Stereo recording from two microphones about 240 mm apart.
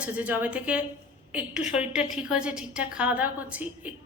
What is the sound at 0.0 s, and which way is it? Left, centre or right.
A woman's voice, centre.